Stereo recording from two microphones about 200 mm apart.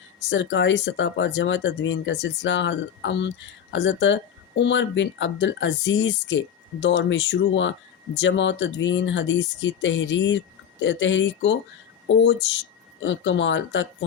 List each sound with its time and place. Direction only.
0.3 s speech: 65° left (ahead or behind)